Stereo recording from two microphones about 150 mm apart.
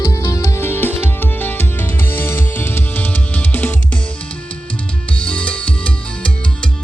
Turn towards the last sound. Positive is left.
turn(degrees=5)  # may be behind; listen again after turning